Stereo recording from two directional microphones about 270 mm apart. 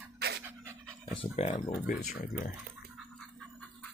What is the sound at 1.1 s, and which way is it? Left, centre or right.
Speech, left.